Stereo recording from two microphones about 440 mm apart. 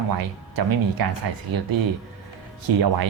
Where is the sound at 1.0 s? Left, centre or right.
Right.